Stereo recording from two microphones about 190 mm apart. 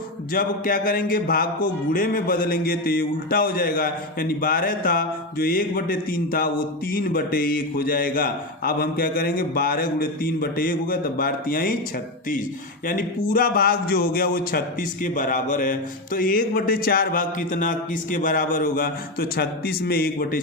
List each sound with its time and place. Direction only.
0.3 s speech: 50° left (ahead or behind)
12.9 s speech: 50° left (ahead or behind)